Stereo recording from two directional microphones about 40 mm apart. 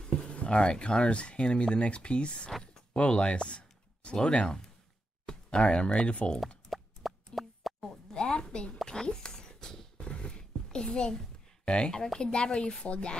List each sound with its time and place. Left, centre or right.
0.0 s speech: left
6.7 s plop: centre
8.1 s a sound: left
11.6 s speech: left